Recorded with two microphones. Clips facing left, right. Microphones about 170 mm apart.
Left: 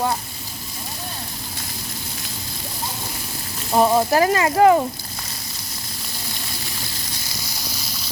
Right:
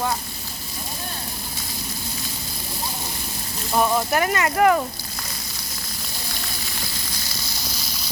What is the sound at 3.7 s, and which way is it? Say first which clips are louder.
Speech: left 4 dB; 25° left (ahead or behind).